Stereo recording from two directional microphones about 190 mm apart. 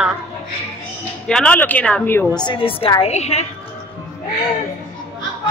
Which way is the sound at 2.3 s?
25° left (ahead or behind).